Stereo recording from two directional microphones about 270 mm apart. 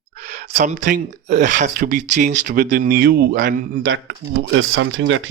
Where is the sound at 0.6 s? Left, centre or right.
Right.